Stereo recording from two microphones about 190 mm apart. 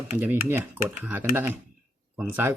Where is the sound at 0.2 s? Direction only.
10° right (ahead or behind).